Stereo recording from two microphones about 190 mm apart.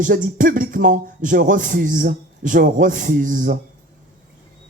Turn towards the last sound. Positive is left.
turn(degrees=-45)  # may be behind; listen again after turning